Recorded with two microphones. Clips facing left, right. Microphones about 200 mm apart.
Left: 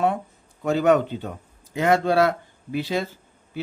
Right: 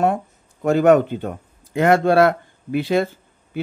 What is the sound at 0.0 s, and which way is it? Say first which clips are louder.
Speech: right 3 dB; 50° right (ahead or behind).